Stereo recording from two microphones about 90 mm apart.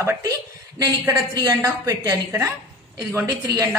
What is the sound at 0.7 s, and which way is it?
A woman's voice, 40° right (ahead or behind).